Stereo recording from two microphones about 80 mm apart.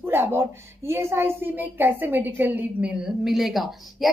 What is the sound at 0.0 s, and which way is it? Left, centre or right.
A woman's voice, right.